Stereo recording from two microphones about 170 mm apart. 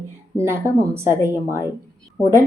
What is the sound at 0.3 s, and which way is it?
A woman's voice, 15° right (ahead or behind).